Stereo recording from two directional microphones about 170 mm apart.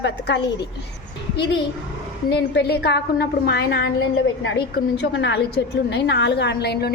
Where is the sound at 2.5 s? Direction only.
75° left (ahead or behind).